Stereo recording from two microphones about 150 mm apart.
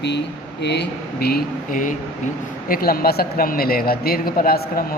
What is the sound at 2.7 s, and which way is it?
Speech, 80° left.